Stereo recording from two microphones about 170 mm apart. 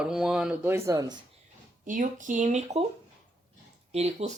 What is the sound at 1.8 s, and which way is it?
Speech, 50° right (ahead or behind).